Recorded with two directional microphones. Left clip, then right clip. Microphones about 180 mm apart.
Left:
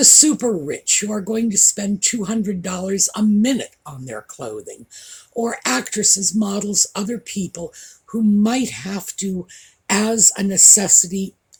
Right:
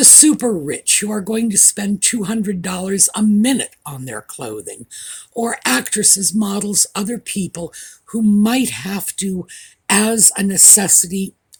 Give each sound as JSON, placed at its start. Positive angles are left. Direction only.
{"t": 0.0, "sound": "speech", "side_deg": -45}